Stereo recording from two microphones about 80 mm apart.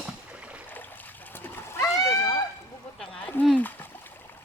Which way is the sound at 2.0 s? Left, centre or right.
Left.